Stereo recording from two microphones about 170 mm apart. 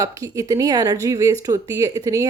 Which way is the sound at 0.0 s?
20° right (ahead or behind).